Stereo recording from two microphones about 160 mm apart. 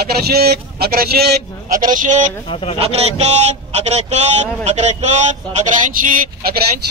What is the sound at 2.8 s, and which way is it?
A man's voice, 40° right (ahead or behind).